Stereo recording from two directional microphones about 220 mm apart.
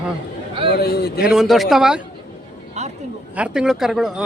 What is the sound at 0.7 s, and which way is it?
Speech, 45° left (ahead or behind).